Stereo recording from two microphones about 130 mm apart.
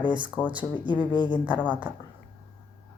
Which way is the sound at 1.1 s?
35° left (ahead or behind).